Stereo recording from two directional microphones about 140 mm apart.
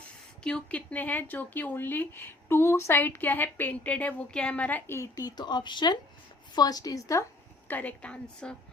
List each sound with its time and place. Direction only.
0.4 s a woman's voice: 5° left (ahead or behind); by 7.3 s 25° left (ahead or behind)
7.7 s speech: 10° left (ahead or behind)